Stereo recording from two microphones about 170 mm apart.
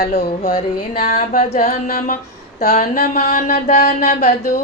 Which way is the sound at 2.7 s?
50° left (ahead or behind).